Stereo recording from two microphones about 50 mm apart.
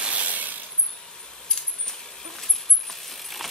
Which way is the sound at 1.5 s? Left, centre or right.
Centre.